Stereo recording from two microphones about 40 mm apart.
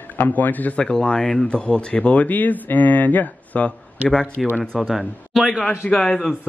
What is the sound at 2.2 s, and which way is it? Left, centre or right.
Speech, left.